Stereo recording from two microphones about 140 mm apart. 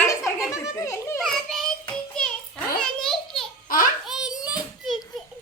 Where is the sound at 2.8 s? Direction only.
Centre (ahead or behind).